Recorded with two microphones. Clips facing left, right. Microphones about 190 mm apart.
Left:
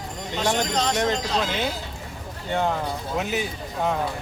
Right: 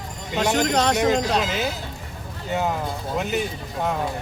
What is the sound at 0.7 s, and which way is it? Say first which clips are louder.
Speech: right 4 dB; 65° right (ahead or behind).